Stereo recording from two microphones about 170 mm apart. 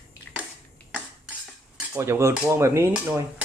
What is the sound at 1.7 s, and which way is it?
Cutlery, 15° right (ahead or behind).